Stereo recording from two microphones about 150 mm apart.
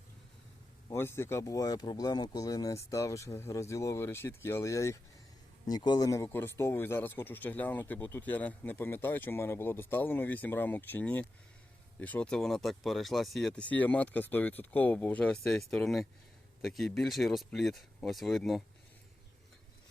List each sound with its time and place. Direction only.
0.9 s speech: 15° left (ahead or behind); by 18.6 s centre (ahead or behind)